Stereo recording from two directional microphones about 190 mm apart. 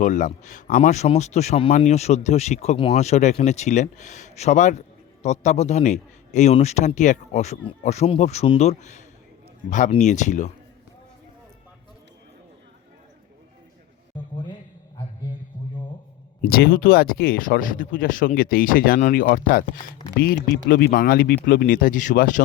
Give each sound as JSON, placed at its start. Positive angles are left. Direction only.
{"t": 0.0, "sound": "speech", "side_deg": 40}
{"t": 15.5, "sound": "music", "side_deg": 25}
{"t": 16.4, "sound": "speech", "side_deg": 50}